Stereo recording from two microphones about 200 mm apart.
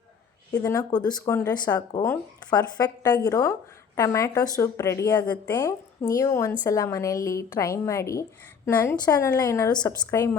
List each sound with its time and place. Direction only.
0.5 s speech: 15° left (ahead or behind)